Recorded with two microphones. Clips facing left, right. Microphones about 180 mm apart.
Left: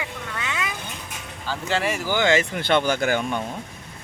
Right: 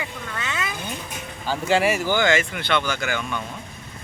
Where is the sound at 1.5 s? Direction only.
10° right (ahead or behind).